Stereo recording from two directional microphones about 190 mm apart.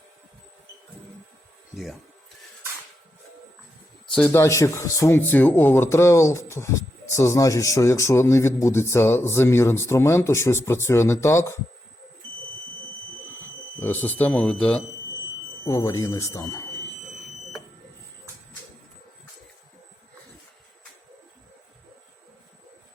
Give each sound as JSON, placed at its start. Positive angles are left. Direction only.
{"t": 1.7, "sound": "speech", "side_deg": 0}
{"t": 4.1, "sound": "speech", "side_deg": 10}
{"t": 13.7, "sound": "speech", "side_deg": 10}
{"t": 15.6, "sound": "speech", "side_deg": 15}